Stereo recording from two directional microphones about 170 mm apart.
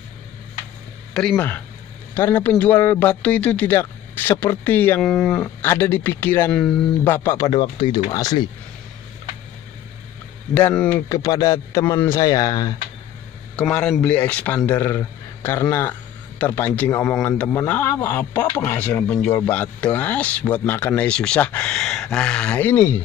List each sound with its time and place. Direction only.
1.1 s a man's voice: 5° left (ahead or behind)
5.6 s a man's voice: 15° left (ahead or behind)
7.2 s speech: 20° left (ahead or behind)
10.5 s a man's voice: 10° left (ahead or behind)
11.1 s speech: 20° left (ahead or behind)
13.6 s a man's voice: 5° left (ahead or behind)